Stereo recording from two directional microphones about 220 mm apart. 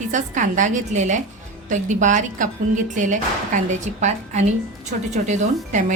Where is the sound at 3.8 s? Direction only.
30° right (ahead or behind).